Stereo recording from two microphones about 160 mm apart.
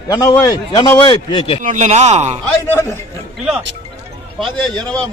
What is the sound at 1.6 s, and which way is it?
Speech, 50° right (ahead or behind).